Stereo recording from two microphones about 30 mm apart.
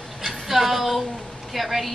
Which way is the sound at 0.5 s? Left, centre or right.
Centre.